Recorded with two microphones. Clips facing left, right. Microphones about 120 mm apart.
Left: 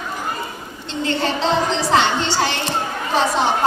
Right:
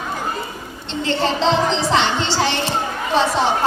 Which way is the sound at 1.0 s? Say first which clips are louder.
Right 2 dB; 30° right (ahead or behind).